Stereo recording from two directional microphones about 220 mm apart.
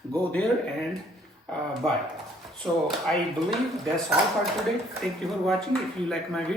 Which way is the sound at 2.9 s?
Centre (ahead or behind).